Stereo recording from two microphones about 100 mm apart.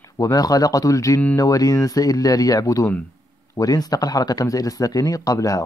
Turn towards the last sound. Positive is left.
turn(degrees=35)  # may be behind; listen again after turning